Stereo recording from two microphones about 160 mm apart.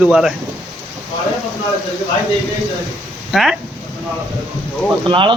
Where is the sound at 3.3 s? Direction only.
Centre (ahead or behind).